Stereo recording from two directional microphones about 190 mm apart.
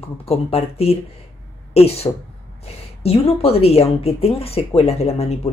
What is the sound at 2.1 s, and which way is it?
Speech, 25° left (ahead or behind).